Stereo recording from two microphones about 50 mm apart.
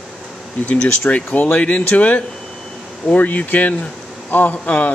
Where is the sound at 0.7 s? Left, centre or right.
Left.